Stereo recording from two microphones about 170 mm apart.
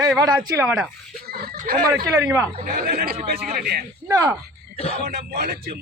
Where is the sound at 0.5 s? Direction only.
5° right (ahead or behind).